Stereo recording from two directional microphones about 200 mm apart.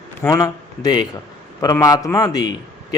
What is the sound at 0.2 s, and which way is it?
A man's voice, 15° left (ahead or behind).